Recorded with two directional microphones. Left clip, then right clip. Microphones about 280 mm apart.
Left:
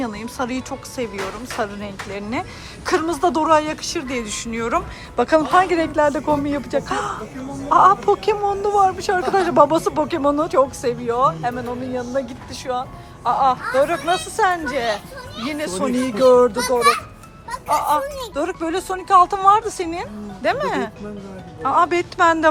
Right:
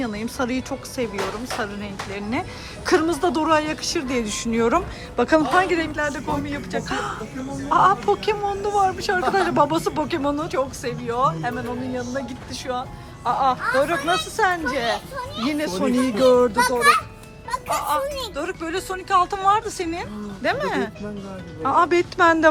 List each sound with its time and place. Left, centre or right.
0.0 s speech: centre